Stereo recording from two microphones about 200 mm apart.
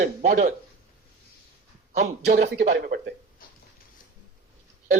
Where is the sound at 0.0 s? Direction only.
45° right (ahead or behind).